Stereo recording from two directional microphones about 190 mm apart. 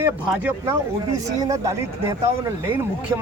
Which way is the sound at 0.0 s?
10° right (ahead or behind).